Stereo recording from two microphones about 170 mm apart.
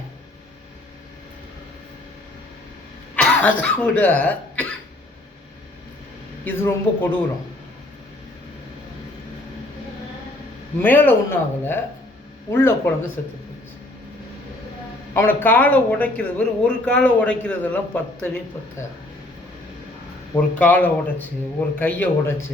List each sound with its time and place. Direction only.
3.2 s speech: 5° left (ahead or behind)
6.4 s speech: 10° left (ahead or behind)
10.8 s speech: 10° left (ahead or behind)
15.1 s speech: 15° left (ahead or behind)
20.3 s speech: 10° left (ahead or behind)